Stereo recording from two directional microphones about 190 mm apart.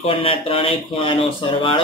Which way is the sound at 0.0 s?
30° left (ahead or behind).